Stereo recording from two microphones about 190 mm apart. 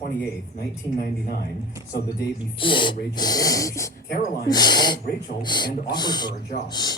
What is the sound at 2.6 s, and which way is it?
Speech, 25° left (ahead or behind).